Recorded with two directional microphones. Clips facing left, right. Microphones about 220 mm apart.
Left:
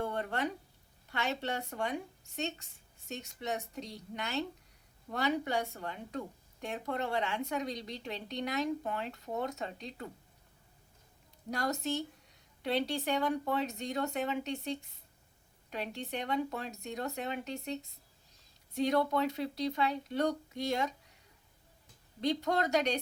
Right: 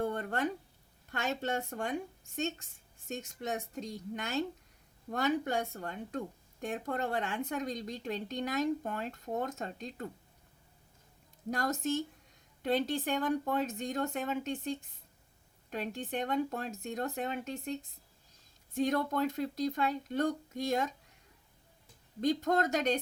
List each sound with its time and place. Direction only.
0.0 s a sound: 45° right (ahead or behind)
1.2 s a woman's voice: 45° right (ahead or behind)
11.5 s a woman's voice: 50° right (ahead or behind)
22.2 s a woman's voice: 50° right (ahead or behind)